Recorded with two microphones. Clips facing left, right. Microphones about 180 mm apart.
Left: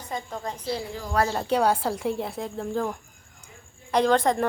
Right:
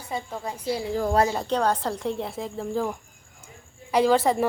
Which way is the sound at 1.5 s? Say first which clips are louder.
Left 1 dB; 10° left (ahead or behind).